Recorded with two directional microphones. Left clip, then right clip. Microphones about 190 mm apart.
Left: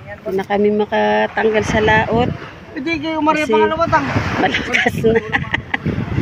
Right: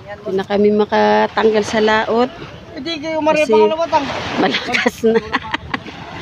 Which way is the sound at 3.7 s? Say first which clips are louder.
Left 1 dB; 20° right (ahead or behind).